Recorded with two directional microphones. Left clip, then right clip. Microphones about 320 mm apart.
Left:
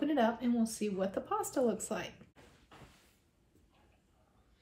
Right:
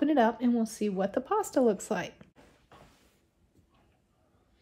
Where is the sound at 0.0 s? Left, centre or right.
Right.